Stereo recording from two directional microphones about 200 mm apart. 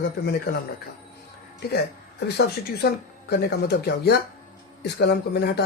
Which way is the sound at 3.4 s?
55° left (ahead or behind).